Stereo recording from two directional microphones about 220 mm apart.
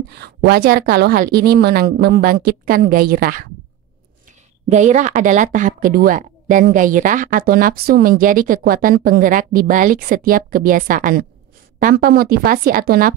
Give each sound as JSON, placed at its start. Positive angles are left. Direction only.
{"t": 0.2, "sound": "speech", "side_deg": -45}
{"t": 4.6, "sound": "speech", "side_deg": -35}